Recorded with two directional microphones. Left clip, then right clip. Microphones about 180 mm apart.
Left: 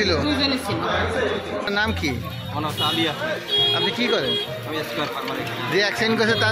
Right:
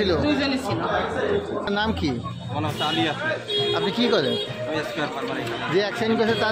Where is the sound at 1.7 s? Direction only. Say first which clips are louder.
Left 2 dB; 15° right (ahead or behind).